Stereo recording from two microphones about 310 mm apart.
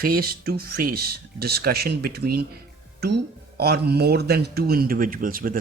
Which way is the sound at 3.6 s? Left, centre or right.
Right.